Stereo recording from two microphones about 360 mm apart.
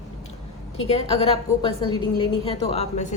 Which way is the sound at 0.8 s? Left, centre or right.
Centre.